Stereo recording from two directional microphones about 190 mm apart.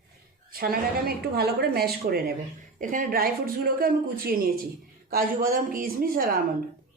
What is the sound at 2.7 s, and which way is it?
A man's voice, 45° right (ahead or behind).